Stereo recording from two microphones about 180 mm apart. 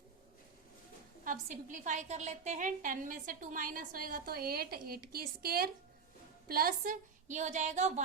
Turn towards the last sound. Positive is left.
turn(degrees=-40)  # may be behind; listen again after turning